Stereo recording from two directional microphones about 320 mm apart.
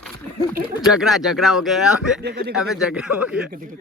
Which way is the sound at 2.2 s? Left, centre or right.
Right.